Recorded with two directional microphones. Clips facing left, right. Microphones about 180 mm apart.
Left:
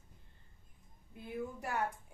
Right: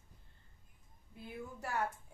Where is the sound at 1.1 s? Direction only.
15° left (ahead or behind).